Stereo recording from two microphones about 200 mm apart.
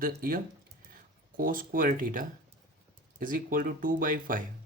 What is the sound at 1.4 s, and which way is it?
Speech, 45° right (ahead or behind).